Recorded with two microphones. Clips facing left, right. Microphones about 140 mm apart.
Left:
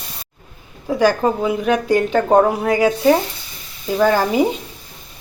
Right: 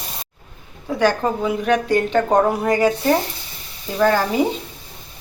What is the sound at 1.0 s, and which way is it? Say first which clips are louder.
Speech: left 2 dB; 10° left (ahead or behind).